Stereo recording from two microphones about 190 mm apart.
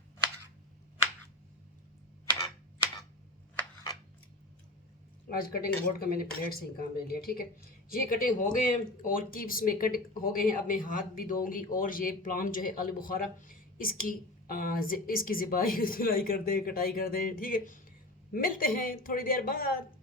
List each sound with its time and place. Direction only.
5.4 s speech: 50° left (ahead or behind)